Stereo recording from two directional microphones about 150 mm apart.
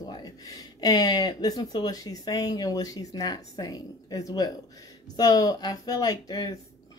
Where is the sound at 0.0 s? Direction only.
25° left (ahead or behind).